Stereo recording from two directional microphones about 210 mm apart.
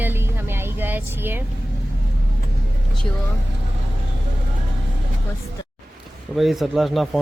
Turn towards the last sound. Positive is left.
turn(degrees=0)  # may be behind; listen again after turning